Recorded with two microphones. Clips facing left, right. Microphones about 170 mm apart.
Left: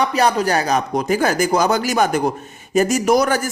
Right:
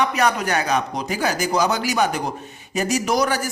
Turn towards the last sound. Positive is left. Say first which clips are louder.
# left 5 dB
turn(degrees=50)  # may be behind; listen again after turning